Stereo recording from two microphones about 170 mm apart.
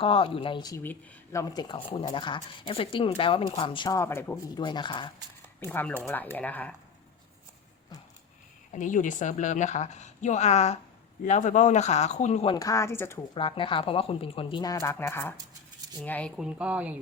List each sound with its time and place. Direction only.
0.0 s speech: 30° left (ahead or behind)
0.8 s speech: 15° left (ahead or behind)
4.5 s speech: 25° left (ahead or behind)
5.5 s speech: 10° left (ahead or behind)
8.7 s a woman's voice: 50° left (ahead or behind)
12.5 s speech: 20° left (ahead or behind)
13.3 s speech: 30° left (ahead or behind); by 16.3 s 10° left (ahead or behind)
16.4 s speech: 5° right (ahead or behind)